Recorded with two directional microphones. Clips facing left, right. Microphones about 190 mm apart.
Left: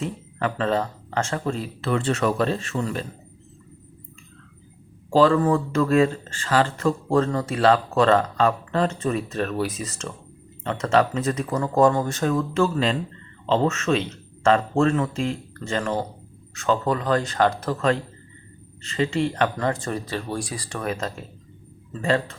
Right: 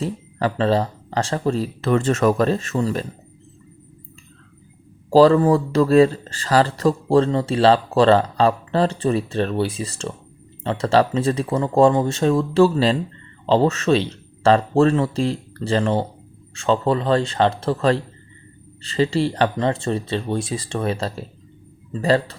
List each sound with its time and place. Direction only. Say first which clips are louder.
0.0 s speech: right 4 dB; 35° right (ahead or behind)
5.1 s speech: right 5 dB; 35° right (ahead or behind)